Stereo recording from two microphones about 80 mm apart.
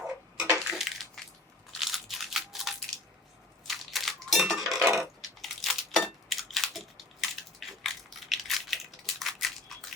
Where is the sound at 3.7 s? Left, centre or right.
Centre.